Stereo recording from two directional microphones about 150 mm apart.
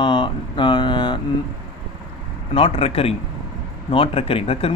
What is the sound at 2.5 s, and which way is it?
Speech, 35° left (ahead or behind).